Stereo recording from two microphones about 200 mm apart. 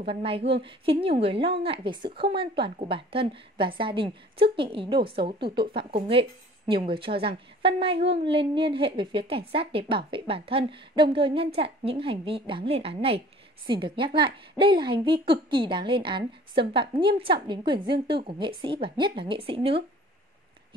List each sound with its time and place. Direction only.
0.0 s speech: 25° right (ahead or behind)
0.4 s female singing: 60° right (ahead or behind)
0.7 s speech: 30° right (ahead or behind)